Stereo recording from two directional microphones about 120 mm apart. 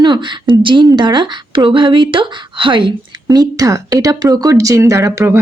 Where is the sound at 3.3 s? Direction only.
30° right (ahead or behind).